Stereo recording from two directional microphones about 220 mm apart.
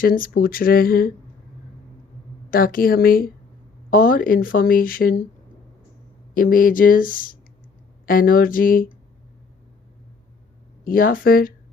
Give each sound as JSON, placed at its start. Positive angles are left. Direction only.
{"t": 0.0, "sound": "speech", "side_deg": 40}
{"t": 2.5, "sound": "speech", "side_deg": 40}
{"t": 6.3, "sound": "speech", "side_deg": 40}
{"t": 10.8, "sound": "speech", "side_deg": 40}